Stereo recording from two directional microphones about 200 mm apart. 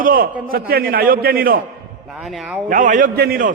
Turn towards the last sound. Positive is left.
turn(degrees=-45)  # may be behind; listen again after turning